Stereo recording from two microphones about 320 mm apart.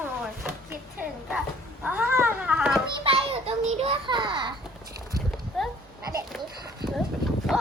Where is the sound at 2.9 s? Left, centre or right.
Centre.